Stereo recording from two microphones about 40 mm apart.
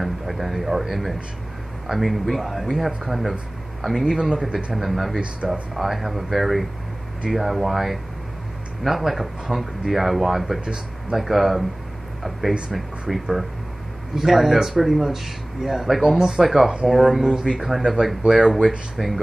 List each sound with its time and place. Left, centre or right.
0.0 s speech: centre
10.6 s speech: right
11.1 s speech: centre